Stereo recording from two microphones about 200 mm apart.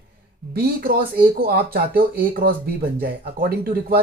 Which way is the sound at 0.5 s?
50° right (ahead or behind).